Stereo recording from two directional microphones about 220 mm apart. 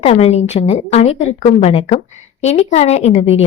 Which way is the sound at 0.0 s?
30° left (ahead or behind).